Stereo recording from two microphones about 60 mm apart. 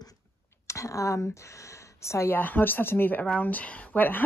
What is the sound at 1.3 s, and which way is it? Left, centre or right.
Speech, left.